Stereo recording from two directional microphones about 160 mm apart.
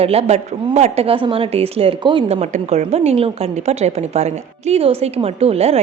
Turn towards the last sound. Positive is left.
turn(degrees=-40)  # may be behind; listen again after turning